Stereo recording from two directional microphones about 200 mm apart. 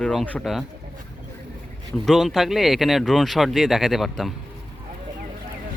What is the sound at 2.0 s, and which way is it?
Speech, centre (ahead or behind).